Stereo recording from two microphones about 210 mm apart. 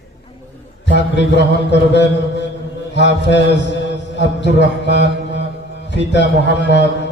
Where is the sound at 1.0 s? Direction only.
55° left (ahead or behind).